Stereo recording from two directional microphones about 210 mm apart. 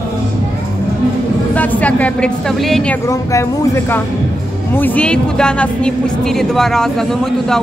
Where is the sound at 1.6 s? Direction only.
5° left (ahead or behind).